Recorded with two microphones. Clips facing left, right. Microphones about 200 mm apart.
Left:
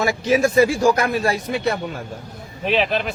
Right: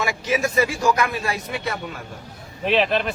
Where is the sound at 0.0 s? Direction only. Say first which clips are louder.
Left 5 dB; 35° left (ahead or behind).